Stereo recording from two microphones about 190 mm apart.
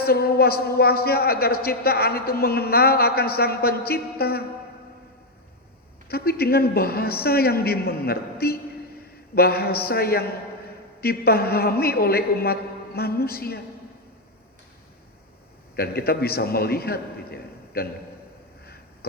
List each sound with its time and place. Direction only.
0.0 s a man's voice: 55° left (ahead or behind)
6.1 s a man's voice: 55° left (ahead or behind)
15.7 s a man's voice: 55° left (ahead or behind)